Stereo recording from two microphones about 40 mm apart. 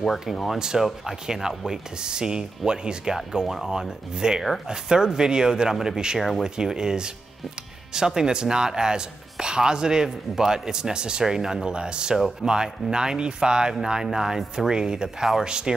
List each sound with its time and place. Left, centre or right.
0.0 s speech: centre
0.6 s speech: centre